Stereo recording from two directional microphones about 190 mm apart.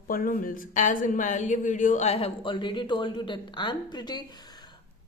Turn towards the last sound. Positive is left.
turn(degrees=20)  # may be behind; listen again after turning